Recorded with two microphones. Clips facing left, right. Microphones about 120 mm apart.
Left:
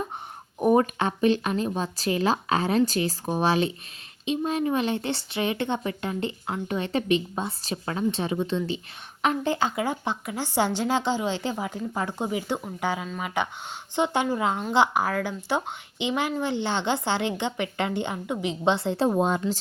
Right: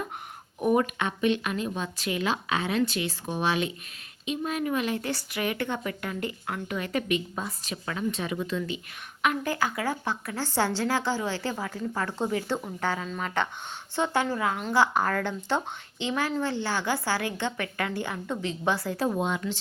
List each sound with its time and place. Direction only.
0.6 s speech: 35° left (ahead or behind)
14.9 s speech: 5° left (ahead or behind); by 19.4 s 35° left (ahead or behind)